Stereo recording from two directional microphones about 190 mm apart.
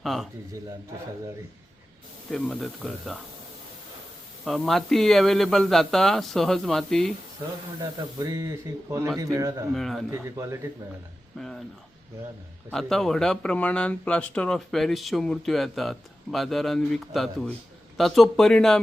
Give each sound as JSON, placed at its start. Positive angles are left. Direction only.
{"t": 0.0, "sound": "speech", "side_deg": 0}
{"t": 2.3, "sound": "speech", "side_deg": 0}
{"t": 4.4, "sound": "speech", "side_deg": 0}
{"t": 7.8, "sound": "speech", "side_deg": -15}
{"t": 9.7, "sound": "speech", "side_deg": 0}
{"t": 10.1, "sound": "speech", "side_deg": -15}
{"t": 11.3, "sound": "speech", "side_deg": 0}
{"t": 12.7, "sound": "speech", "side_deg": 0}